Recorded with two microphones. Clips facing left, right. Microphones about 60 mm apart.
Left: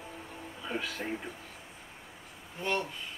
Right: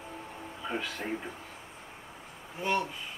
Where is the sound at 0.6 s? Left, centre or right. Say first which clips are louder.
Right 1 dB; centre.